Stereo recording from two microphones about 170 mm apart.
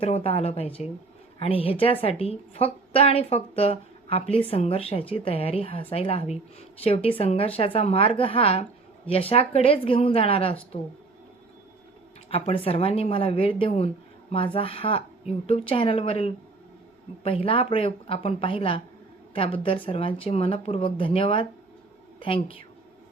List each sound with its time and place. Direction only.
0.0 s a woman's voice: 35° left (ahead or behind)
12.3 s a woman's voice: 35° left (ahead or behind)